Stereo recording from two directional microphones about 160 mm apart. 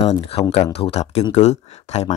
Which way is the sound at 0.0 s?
40° left (ahead or behind).